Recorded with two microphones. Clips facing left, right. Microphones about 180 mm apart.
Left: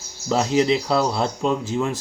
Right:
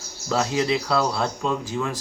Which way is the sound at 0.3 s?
25° left (ahead or behind).